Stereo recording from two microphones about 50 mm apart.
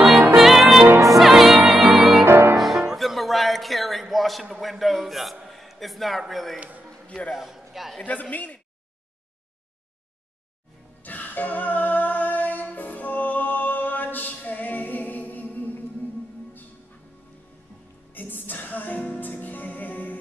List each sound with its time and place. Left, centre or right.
0.3 s music: centre
2.2 s music: right
2.5 s music: centre
3.0 s a sound: centre
7.1 s a man's voice: left
7.3 s a man's voice: centre
8.0 s speech: left
11.0 s music: left
18.1 s music: left